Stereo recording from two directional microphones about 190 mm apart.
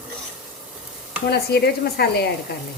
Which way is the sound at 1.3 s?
55° left (ahead or behind).